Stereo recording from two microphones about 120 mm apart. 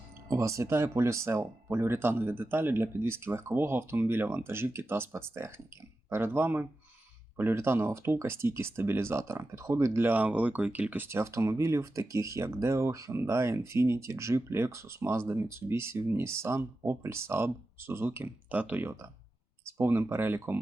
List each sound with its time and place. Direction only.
0.3 s speech: 25° right (ahead or behind)